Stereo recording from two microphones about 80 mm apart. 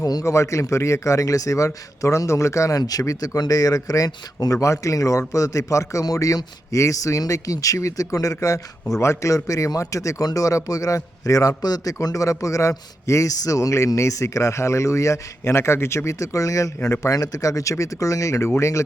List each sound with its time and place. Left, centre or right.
0.0 s a man's voice: left